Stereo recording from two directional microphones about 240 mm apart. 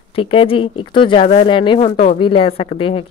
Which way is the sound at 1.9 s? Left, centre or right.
Left.